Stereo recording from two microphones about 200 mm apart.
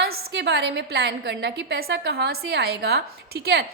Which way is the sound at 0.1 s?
60° right (ahead or behind).